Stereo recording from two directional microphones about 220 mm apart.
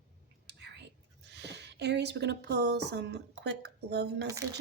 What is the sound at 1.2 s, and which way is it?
Speech, 50° right (ahead or behind).